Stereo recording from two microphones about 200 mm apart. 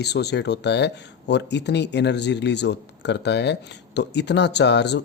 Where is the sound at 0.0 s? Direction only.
55° left (ahead or behind).